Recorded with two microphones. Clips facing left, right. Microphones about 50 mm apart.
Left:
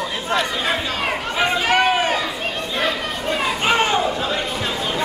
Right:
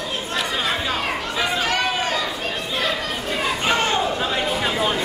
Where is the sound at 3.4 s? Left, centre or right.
Centre.